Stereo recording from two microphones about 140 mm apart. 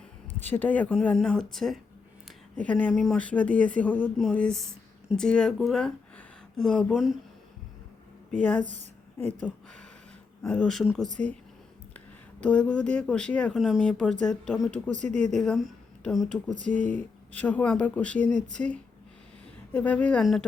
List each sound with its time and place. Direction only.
0.4 s speech: 15° left (ahead or behind); by 7.2 s 5° right (ahead or behind)
8.4 s speech: 10° left (ahead or behind)
8.6 s a woman's voice: 60° right (ahead or behind)
9.1 s speech: 10° left (ahead or behind)